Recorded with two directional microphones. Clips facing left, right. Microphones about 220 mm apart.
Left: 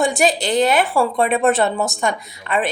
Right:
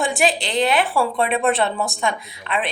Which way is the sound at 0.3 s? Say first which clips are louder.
Left 3 dB; 45° left (ahead or behind).